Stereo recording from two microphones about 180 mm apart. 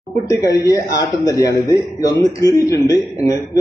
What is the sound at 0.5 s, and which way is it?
A man's voice, 20° left (ahead or behind).